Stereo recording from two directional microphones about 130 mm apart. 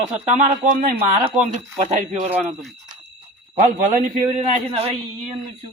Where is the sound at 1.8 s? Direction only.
70° right (ahead or behind).